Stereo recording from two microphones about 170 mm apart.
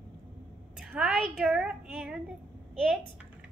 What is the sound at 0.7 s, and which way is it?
A woman's voice, centre (ahead or behind).